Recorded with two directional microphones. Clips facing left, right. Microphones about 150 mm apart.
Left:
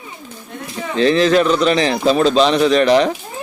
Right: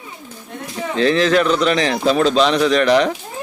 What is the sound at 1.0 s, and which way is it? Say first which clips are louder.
Speech: left 2 dB; 25° left (ahead or behind).